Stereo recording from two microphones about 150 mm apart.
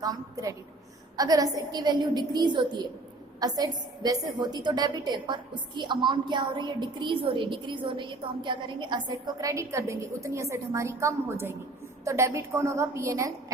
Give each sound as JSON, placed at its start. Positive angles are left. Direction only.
{"t": 0.0, "sound": "a woman's voice", "side_deg": -25}